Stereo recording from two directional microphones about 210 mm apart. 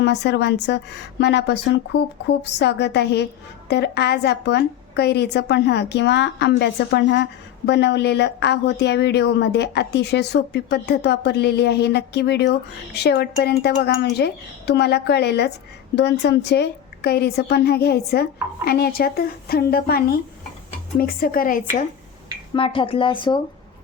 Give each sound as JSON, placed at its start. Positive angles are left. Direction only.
{"t": 0.0, "sound": "a woman's voice", "side_deg": 55}
{"t": 22.5, "sound": "speech", "side_deg": 25}